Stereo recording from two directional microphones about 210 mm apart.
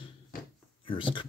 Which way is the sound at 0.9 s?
25° left (ahead or behind).